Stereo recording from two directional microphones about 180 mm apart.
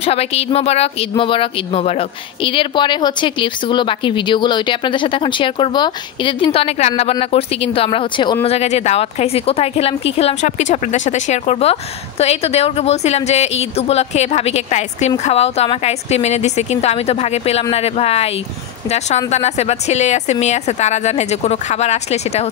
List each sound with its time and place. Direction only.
0.0 s a woman's voice: 35° left (ahead or behind)